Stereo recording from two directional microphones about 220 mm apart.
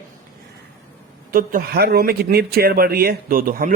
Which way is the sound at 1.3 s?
40° right (ahead or behind).